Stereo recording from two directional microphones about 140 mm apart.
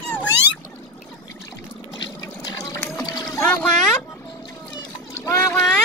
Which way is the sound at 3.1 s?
25° left (ahead or behind).